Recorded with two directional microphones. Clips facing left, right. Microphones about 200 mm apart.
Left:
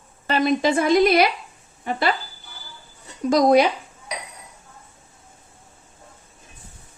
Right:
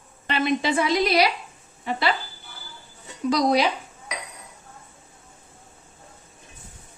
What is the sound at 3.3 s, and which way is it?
Speech, 50° left (ahead or behind).